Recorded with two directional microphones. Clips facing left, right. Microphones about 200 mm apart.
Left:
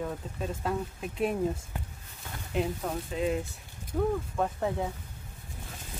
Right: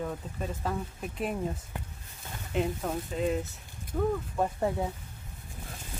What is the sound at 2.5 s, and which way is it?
Speech, centre (ahead or behind).